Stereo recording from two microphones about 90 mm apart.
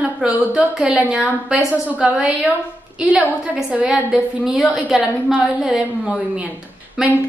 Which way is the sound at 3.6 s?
10° right (ahead or behind).